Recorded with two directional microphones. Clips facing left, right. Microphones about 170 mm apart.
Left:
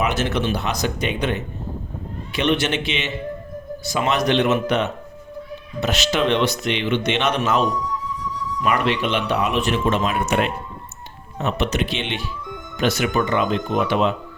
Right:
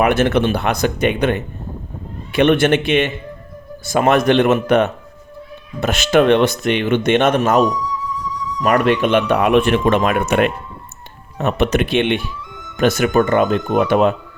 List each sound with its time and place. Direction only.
0.0 s speech: 55° right (ahead or behind)